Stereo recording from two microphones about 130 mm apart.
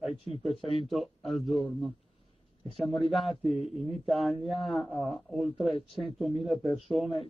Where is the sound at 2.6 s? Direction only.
Centre (ahead or behind).